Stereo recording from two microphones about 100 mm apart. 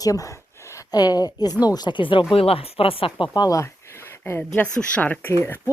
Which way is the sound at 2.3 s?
70° left (ahead or behind).